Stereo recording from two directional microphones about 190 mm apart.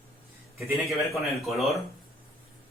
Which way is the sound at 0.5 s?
Centre (ahead or behind).